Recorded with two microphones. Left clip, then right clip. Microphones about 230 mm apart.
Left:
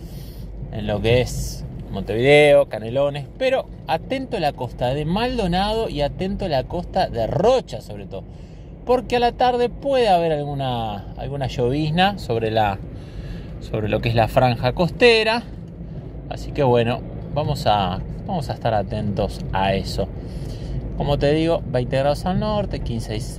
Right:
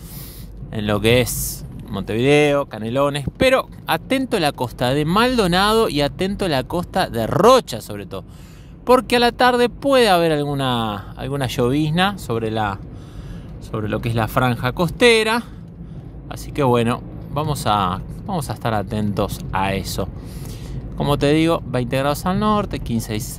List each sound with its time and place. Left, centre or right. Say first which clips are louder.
0.7 s speech: right 3 dB; right